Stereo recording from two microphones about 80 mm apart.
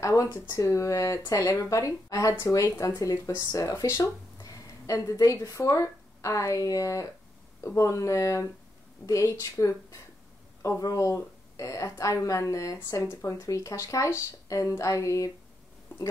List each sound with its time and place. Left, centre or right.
0.0 s a woman's voice: left